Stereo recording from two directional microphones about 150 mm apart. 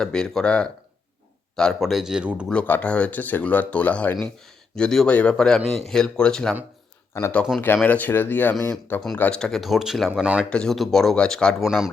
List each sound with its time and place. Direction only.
0.0 s speech: 5° left (ahead or behind)
2.5 s speech: 10° left (ahead or behind)
7.1 s speech: 20° left (ahead or behind); by 10.4 s 10° right (ahead or behind)
10.5 s speech: 5° left (ahead or behind)